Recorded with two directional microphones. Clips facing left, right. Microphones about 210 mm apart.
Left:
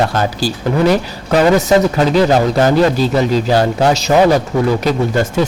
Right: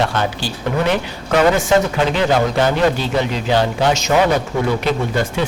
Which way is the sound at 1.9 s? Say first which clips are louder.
Left 4 dB; 40° left (ahead or behind).